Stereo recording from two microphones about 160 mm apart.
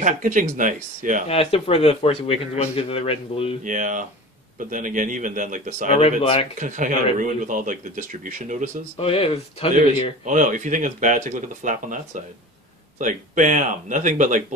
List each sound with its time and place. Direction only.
0.0 s speech: 55° right (ahead or behind)
1.3 s speech: 40° left (ahead or behind)
3.6 s speech: 50° right (ahead or behind)
5.9 s speech: 40° left (ahead or behind)
6.6 s speech: 50° right (ahead or behind)
8.9 s speech: 35° left (ahead or behind)
10.2 s speech: 50° right (ahead or behind)